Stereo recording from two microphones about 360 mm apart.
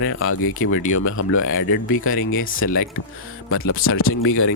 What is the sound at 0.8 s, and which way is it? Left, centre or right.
Speech, left.